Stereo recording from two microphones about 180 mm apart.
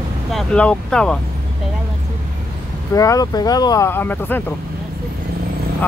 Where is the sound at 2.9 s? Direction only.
20° left (ahead or behind).